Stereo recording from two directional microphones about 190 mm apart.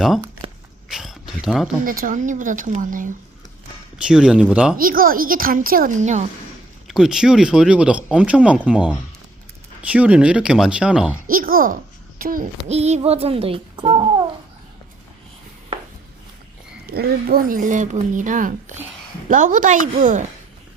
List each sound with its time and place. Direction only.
0.4 s a sound: 25° right (ahead or behind)
0.9 s a sound: centre (ahead or behind)
1.8 s speech: 45° right (ahead or behind)
3.9 s speech: 5° right (ahead or behind)
4.8 s speech: 50° right (ahead or behind)
6.8 s speech: 5° right (ahead or behind)
11.3 s a child's voice: 50° right (ahead or behind); by 14.1 s 25° right (ahead or behind)
16.8 s speech: 55° right (ahead or behind)